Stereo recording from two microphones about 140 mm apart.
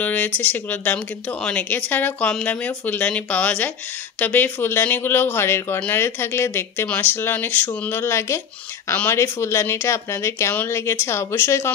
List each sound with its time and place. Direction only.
0.0 s speech: 10° left (ahead or behind)